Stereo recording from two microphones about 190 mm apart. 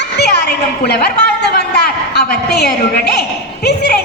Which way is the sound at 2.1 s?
60° left (ahead or behind).